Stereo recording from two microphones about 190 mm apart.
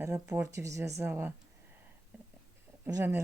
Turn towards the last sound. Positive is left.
turn(degrees=-15)  # may be behind; listen again after turning